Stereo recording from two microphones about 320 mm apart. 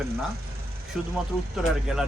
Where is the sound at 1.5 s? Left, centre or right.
Centre.